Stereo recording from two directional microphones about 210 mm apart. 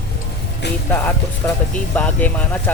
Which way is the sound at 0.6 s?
55° left (ahead or behind).